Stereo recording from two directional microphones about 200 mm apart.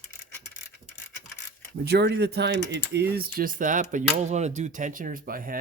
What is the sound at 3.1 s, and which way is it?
Speech, 45° right (ahead or behind).